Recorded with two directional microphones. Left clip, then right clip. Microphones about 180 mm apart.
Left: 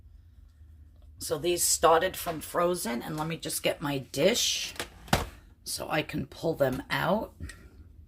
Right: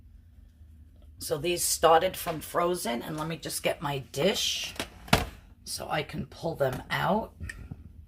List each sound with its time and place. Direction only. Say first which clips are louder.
1.2 s speech: left 1 dB; 10° left (ahead or behind); by 4.6 s 30° left (ahead or behind)
5.6 s speech: left 1 dB; 30° left (ahead or behind)